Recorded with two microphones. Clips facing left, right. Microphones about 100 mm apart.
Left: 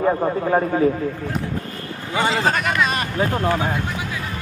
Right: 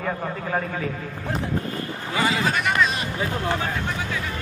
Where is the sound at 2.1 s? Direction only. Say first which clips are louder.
Left 3 dB; 30° left (ahead or behind).